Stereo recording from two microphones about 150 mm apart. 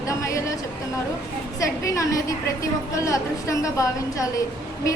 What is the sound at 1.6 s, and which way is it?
A woman's voice, 20° left (ahead or behind).